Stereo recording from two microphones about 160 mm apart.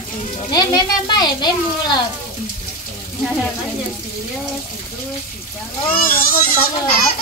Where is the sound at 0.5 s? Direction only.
25° left (ahead or behind).